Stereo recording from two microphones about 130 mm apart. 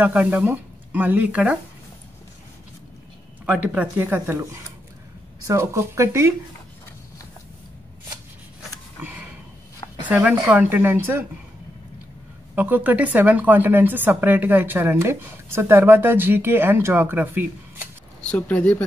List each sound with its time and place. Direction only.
0.0 s speech: 10° right (ahead or behind)
3.4 s speech: 10° right (ahead or behind)
10.0 s speech: 10° right (ahead or behind)
12.5 s speech: 15° right (ahead or behind)
18.2 s speech: 10° left (ahead or behind)